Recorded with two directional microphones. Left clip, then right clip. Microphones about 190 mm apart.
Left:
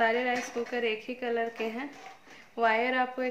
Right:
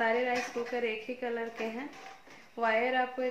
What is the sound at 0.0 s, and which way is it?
A woman's voice, 50° left (ahead or behind).